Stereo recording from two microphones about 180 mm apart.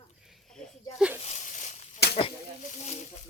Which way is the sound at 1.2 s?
40° left (ahead or behind).